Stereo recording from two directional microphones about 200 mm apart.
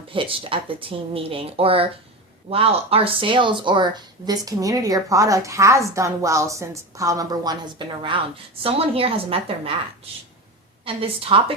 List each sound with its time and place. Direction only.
0.1 s speech: 25° right (ahead or behind)
10.8 s speech: 25° right (ahead or behind)